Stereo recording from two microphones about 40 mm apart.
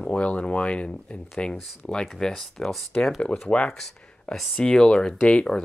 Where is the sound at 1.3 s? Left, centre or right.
Centre.